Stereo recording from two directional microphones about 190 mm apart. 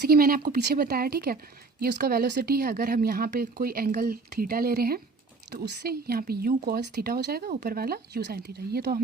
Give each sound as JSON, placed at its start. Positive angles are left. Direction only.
{"t": 0.0, "sound": "a woman's voice", "side_deg": -50}